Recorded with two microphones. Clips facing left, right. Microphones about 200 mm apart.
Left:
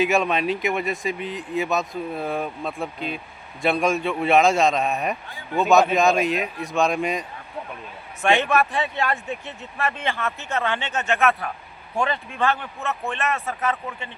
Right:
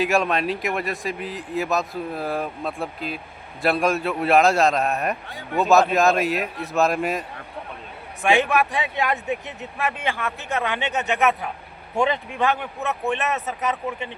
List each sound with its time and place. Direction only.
0.0 s speech: centre (ahead or behind)
8.4 s a man's voice: 15° right (ahead or behind)